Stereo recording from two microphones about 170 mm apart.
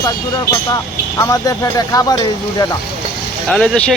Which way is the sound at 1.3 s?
20° left (ahead or behind).